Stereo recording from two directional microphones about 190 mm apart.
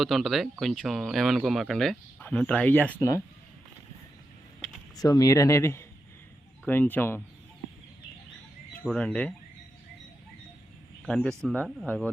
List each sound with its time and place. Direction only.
0.0 s speech: centre (ahead or behind)
4.9 s speech: 20° left (ahead or behind)
8.8 s speech: 5° left (ahead or behind)
11.0 s speech: 5° left (ahead or behind)